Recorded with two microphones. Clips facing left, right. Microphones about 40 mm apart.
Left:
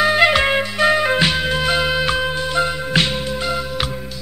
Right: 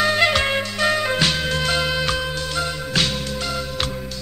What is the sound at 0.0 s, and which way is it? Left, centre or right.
Music, centre.